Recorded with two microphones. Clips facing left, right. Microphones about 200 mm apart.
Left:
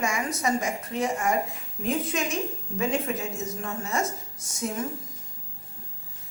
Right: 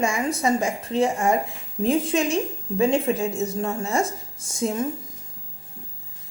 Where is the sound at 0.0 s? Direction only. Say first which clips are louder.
Right 5 dB; 30° right (ahead or behind).